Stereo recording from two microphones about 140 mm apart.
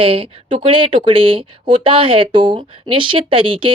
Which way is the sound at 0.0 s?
40° right (ahead or behind).